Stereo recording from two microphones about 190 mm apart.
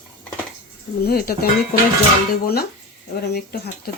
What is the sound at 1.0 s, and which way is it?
Speech, 50° left (ahead or behind).